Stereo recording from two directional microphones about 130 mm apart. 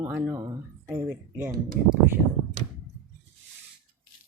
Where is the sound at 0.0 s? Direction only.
15° right (ahead or behind).